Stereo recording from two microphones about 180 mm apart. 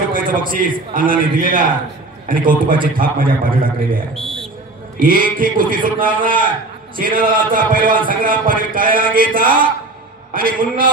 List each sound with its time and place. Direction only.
0.1 s a man's voice: 50° right (ahead or behind)